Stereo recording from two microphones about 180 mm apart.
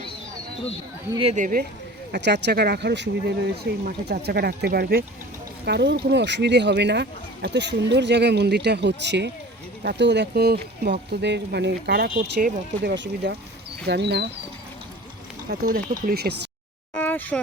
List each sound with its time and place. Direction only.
1.1 s speech: 30° right (ahead or behind)
1.4 s speech: 50° right (ahead or behind)
2.1 s speech: 70° right (ahead or behind)
5.6 s speech: 70° right (ahead or behind)
12.8 s speech: 75° right (ahead or behind)
15.4 s speech: 55° right (ahead or behind)
16.9 s a sound: 10° left (ahead or behind)